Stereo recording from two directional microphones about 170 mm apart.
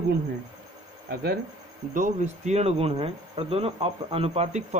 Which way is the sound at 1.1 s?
65° right (ahead or behind).